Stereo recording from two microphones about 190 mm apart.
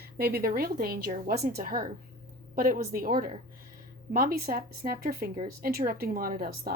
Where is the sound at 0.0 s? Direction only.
55° right (ahead or behind).